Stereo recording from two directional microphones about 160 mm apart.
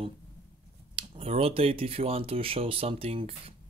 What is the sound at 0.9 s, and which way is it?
Speech, 35° right (ahead or behind).